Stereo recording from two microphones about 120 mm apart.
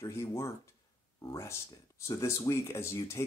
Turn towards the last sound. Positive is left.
turn(degrees=25)  # may be behind; listen again after turning